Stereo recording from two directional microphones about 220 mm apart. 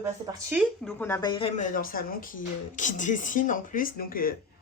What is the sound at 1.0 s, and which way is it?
Speech, 10° left (ahead or behind).